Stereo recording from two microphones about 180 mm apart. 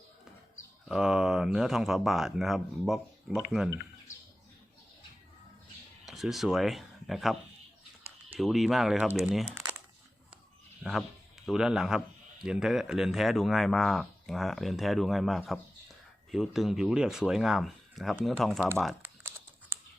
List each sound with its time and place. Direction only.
0.9 s speech: 5° right (ahead or behind)
6.1 s speech: centre (ahead or behind)
8.4 s speech: centre (ahead or behind)
9.6 s crumpling: 5° right (ahead or behind)
10.8 s speech: centre (ahead or behind)
19.0 s typing: 10° right (ahead or behind)